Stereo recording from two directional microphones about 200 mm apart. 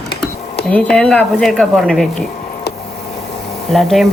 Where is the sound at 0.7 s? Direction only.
5° left (ahead or behind).